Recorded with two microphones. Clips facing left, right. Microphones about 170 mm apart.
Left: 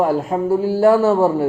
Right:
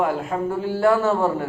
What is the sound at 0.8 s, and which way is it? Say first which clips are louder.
Speech: left 5 dB; 15° left (ahead or behind).